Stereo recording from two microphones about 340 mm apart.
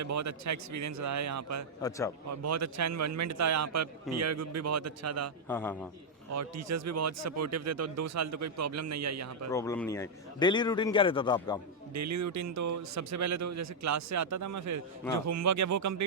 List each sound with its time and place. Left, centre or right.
0.0 s speech: right
1.8 s a man's voice: centre
2.3 s speech: right
5.5 s a man's voice: centre
6.3 s speech: right
9.5 s a man's voice: centre
11.9 s speech: right